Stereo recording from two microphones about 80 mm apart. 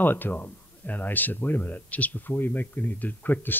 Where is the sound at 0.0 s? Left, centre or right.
Left.